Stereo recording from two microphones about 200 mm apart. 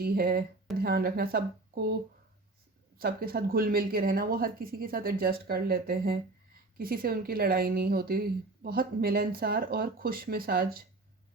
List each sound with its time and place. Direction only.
0.0 s speech: 50° right (ahead or behind)
3.0 s speech: 50° right (ahead or behind)